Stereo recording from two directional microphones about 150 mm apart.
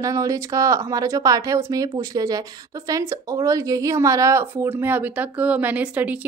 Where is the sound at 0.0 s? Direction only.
20° right (ahead or behind).